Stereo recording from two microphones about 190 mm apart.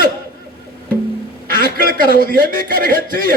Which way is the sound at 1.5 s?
50° right (ahead or behind).